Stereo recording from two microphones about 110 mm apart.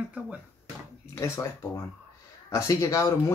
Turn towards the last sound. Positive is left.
turn(degrees=30)  # may be behind; listen again after turning